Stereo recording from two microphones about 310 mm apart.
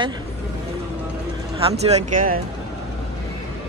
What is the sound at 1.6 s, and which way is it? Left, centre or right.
Speech, right.